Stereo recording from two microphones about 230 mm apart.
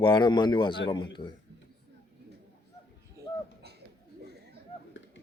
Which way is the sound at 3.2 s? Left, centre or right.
Centre.